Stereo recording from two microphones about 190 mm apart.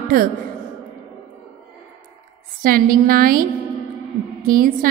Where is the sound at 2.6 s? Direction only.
50° right (ahead or behind).